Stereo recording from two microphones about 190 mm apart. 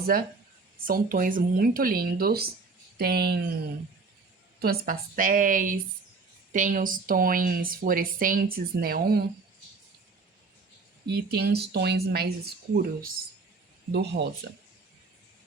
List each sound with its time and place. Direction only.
0.9 s a woman's voice: 45° right (ahead or behind)
4.6 s a woman's voice: 55° right (ahead or behind)
11.0 s a woman's voice: 60° right (ahead or behind)
13.9 s speech: 60° right (ahead or behind)